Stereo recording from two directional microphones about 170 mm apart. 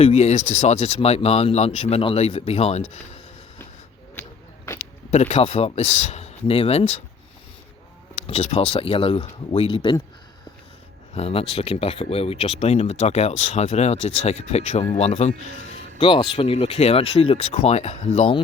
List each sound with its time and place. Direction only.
0.0 s speech: 40° left (ahead or behind)
4.1 s a sound: 15° left (ahead or behind)
4.8 s speech: 40° left (ahead or behind)
8.3 s speech: 35° left (ahead or behind)
11.1 s speech: 35° left (ahead or behind)